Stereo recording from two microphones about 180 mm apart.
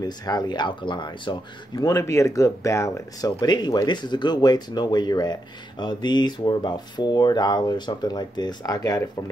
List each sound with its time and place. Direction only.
0.0 s speech: 20° left (ahead or behind)